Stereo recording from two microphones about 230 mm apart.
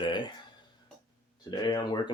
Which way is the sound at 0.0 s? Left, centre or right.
Left.